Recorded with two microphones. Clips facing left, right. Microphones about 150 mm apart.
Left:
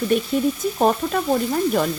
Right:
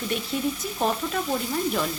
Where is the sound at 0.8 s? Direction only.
50° left (ahead or behind).